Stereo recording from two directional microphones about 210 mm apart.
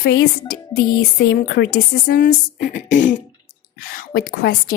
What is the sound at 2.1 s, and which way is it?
A woman's voice, 40° left (ahead or behind).